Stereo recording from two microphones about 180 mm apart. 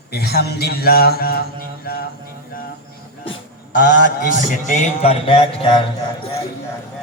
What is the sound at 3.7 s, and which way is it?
A man's voice, 50° left (ahead or behind).